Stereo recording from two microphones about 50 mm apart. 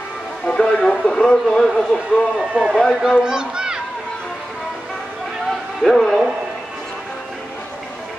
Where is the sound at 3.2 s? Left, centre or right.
Centre.